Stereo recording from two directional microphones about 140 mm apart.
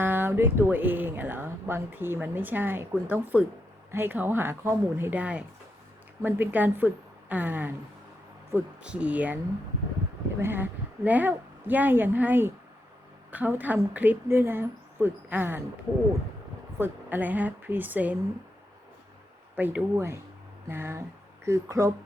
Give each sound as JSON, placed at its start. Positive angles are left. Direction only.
{"t": 0.0, "sound": "speech", "side_deg": -15}
{"t": 10.4, "sound": "speech", "side_deg": -15}
{"t": 16.7, "sound": "speech", "side_deg": -15}
{"t": 19.5, "sound": "speech", "side_deg": -15}